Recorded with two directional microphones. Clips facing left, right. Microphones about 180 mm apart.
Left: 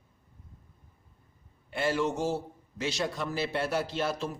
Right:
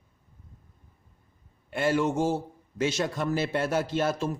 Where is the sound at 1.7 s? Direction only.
50° right (ahead or behind).